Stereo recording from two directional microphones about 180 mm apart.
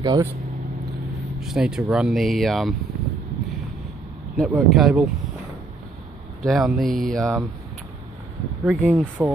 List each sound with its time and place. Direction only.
0.0 s speech: 20° right (ahead or behind)
1.4 s speech: 5° right (ahead or behind)
4.4 s speech: centre (ahead or behind)
6.4 s speech: centre (ahead or behind)
8.6 s speech: 10° right (ahead or behind)